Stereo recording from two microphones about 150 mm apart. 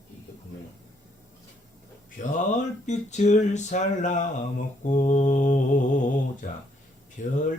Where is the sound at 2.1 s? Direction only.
55° left (ahead or behind).